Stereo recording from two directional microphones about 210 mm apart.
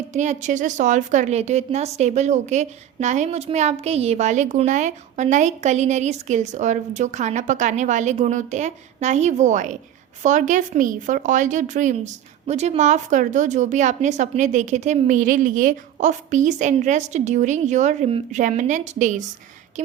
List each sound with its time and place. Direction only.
0.1 s a woman's voice: 35° right (ahead or behind)